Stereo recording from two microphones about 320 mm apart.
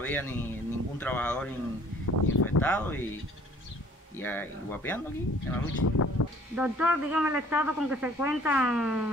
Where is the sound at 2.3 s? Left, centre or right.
Left.